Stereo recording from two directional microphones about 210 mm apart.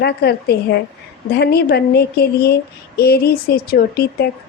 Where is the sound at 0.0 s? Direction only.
50° left (ahead or behind).